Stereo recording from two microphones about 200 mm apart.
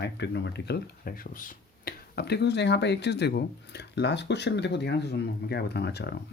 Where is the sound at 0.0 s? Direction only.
60° left (ahead or behind).